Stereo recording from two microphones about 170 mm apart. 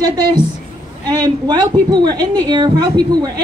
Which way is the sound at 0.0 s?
25° right (ahead or behind).